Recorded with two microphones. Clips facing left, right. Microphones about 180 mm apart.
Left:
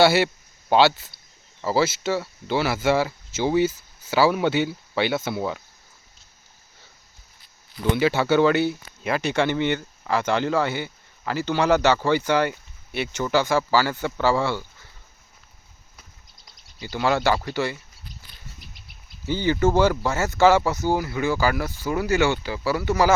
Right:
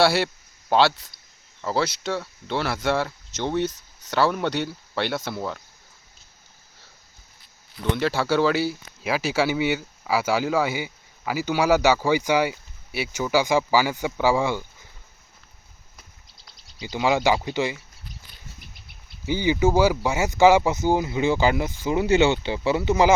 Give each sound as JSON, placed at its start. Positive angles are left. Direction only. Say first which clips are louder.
{"t": 0.0, "sound": "speech", "louder": "left 2 dB", "side_deg": 0}
{"t": 7.9, "sound": "speech", "louder": "left 3 dB", "side_deg": 5}
{"t": 16.8, "sound": "speech", "louder": "right 1 dB", "side_deg": -15}
{"t": 19.2, "sound": "speech", "louder": "even", "side_deg": -15}